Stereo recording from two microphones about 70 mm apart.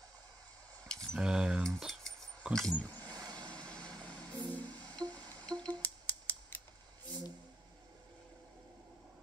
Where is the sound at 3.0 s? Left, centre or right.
Right.